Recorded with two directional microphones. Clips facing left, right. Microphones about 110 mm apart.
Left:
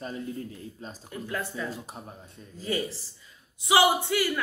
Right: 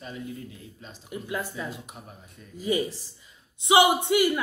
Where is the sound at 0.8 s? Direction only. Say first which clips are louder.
Left 5 dB; 35° left (ahead or behind).